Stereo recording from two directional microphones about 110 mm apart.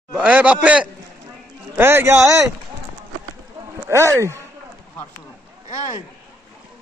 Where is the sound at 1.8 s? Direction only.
20° right (ahead or behind).